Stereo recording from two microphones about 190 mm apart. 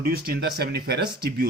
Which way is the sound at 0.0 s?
55° right (ahead or behind).